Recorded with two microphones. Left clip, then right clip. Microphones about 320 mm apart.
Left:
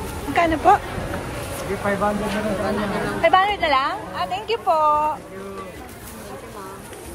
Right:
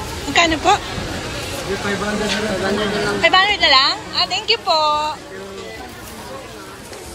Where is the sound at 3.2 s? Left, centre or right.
Centre.